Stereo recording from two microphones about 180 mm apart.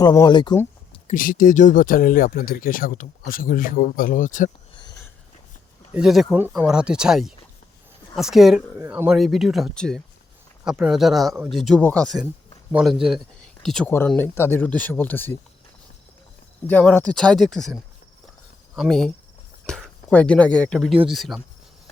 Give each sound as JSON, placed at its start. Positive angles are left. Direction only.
{"t": 0.0, "sound": "speech", "side_deg": 20}
{"t": 0.9, "sound": "speech", "side_deg": 45}
{"t": 4.7, "sound": "a sound", "side_deg": 25}
{"t": 5.9, "sound": "speech", "side_deg": -5}
{"t": 16.6, "sound": "speech", "side_deg": 10}
{"t": 18.8, "sound": "speech", "side_deg": 5}